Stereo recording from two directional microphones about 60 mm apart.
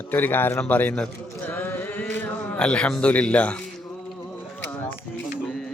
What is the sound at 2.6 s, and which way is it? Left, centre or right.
Speech, centre.